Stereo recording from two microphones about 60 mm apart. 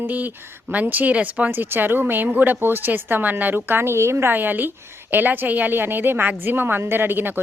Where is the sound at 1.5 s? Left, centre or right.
Right.